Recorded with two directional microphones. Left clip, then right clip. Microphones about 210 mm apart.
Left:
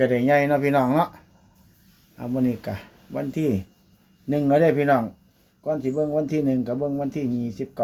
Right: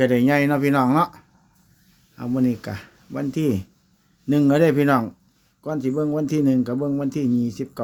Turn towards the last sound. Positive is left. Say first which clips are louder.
# right 4 dB
turn(degrees=-40)  # may be behind; listen again after turning